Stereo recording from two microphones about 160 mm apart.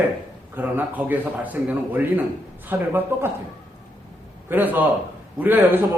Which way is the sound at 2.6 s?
15° right (ahead or behind).